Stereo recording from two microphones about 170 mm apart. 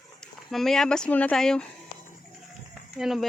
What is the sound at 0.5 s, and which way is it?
Speech, centre (ahead or behind).